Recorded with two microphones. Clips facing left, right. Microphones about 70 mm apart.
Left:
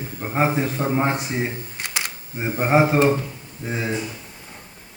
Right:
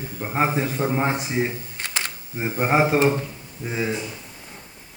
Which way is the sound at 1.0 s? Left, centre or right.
Left.